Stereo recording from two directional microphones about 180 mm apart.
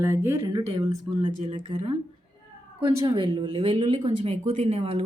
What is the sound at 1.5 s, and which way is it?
Speech, 30° right (ahead or behind).